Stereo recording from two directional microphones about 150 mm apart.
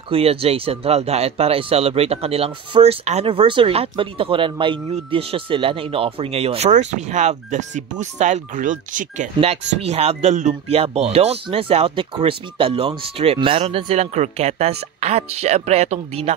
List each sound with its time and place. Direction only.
0.1 s speech: 40° right (ahead or behind); by 9.3 s 60° right (ahead or behind)
9.4 s speech: 40° right (ahead or behind)